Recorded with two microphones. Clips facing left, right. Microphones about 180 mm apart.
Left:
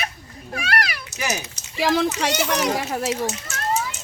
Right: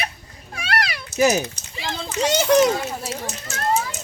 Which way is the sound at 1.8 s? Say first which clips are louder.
Left 4 dB; 90° left.